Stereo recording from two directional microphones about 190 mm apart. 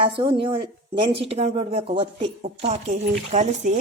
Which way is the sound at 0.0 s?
25° right (ahead or behind).